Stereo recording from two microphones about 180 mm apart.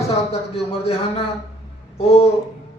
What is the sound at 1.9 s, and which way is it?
Speech, 35° left (ahead or behind).